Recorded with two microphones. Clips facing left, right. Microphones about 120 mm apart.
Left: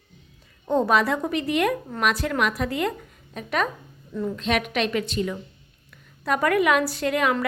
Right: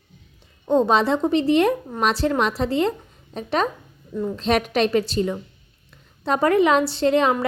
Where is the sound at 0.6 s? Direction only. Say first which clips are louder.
Right 3 dB; 20° right (ahead or behind).